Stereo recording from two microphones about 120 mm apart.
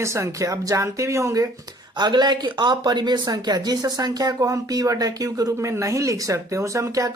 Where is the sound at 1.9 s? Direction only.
40° right (ahead or behind).